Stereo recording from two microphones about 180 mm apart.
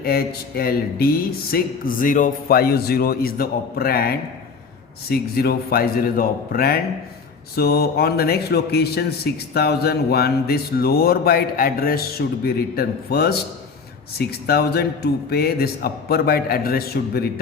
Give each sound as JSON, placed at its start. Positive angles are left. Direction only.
{"t": 0.0, "sound": "speech", "side_deg": 55}